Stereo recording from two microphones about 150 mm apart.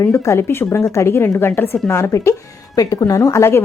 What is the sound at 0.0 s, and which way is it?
A woman's voice, 20° left (ahead or behind).